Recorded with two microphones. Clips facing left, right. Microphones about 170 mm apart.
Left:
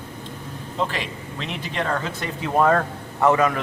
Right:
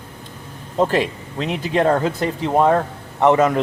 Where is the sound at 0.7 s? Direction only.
45° right (ahead or behind).